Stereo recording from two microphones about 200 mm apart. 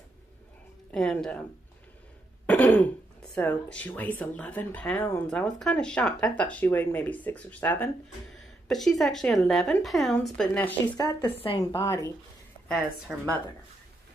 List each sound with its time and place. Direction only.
0.9 s a woman's voice: 5° left (ahead or behind)
2.4 s throat clearing: 10° left (ahead or behind)
3.3 s a woman's voice: 5° left (ahead or behind)
11.3 s speech: 25° left (ahead or behind)
11.7 s speech: 15° left (ahead or behind)
12.6 s a woman's voice: centre (ahead or behind)